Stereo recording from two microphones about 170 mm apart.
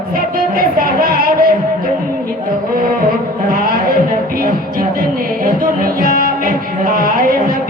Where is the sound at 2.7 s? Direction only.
60° right (ahead or behind).